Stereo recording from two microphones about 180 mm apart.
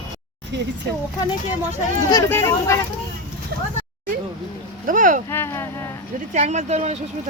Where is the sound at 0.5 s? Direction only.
70° right (ahead or behind).